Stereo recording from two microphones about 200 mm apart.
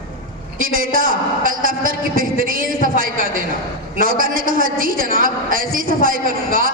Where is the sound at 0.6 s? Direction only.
45° right (ahead or behind).